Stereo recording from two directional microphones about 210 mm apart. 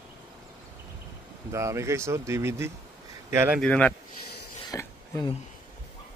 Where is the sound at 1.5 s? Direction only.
15° right (ahead or behind).